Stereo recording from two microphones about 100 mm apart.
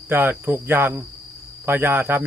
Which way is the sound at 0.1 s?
20° right (ahead or behind).